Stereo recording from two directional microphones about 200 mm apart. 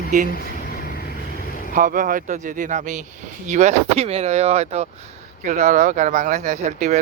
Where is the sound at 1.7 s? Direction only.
40° right (ahead or behind).